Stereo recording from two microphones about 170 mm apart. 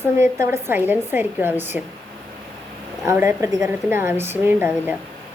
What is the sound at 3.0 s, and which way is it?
A woman's voice, 15° right (ahead or behind).